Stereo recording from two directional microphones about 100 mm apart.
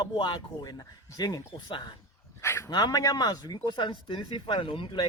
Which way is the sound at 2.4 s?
30° left (ahead or behind).